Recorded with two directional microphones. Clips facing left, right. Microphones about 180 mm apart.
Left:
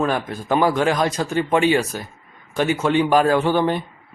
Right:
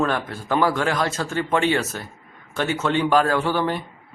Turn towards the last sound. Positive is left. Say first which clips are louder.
# left 4 dB
turn(degrees=20)  # may be behind; listen again after turning